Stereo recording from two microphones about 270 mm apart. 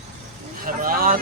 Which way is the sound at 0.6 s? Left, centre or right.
Right.